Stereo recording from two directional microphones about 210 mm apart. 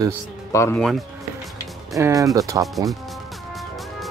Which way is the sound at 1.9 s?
15° right (ahead or behind).